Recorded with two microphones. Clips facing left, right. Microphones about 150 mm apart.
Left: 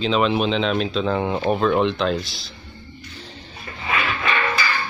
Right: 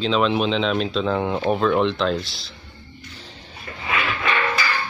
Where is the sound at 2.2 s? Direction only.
30° right (ahead or behind).